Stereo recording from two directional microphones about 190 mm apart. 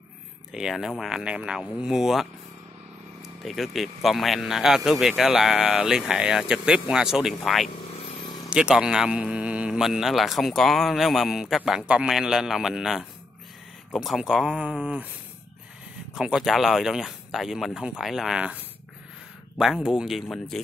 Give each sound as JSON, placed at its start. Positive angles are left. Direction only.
{"t": 0.5, "sound": "speech", "side_deg": 0}
{"t": 16.2, "sound": "speech", "side_deg": -5}
{"t": 19.6, "sound": "speech", "side_deg": -5}